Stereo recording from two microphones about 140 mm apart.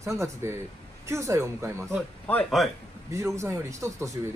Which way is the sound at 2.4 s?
Centre (ahead or behind).